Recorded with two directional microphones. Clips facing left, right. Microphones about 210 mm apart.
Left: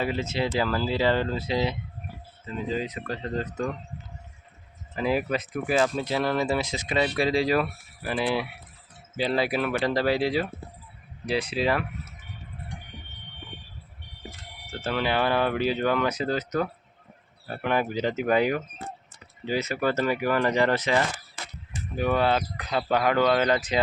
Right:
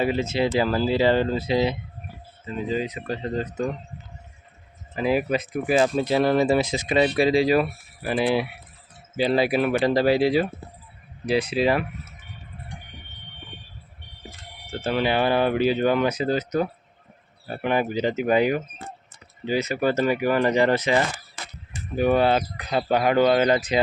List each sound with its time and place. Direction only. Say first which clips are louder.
0.0 s speech: right 5 dB; 15° right (ahead or behind)
2.7 s speech: right 4 dB; 10° right (ahead or behind)
3.4 s speech: right 3 dB; 20° right (ahead or behind)
4.9 s speech: right 3 dB; 5° right (ahead or behind)
14.8 s speech: right 3 dB; 15° right (ahead or behind)
15.5 s speech: right 4 dB; 5° right (ahead or behind)
17.5 s speech: right 3 dB; 10° right (ahead or behind)
19.5 s speech: right 3 dB; 5° left (ahead or behind)
19.7 s speech: right 3 dB; 15° right (ahead or behind)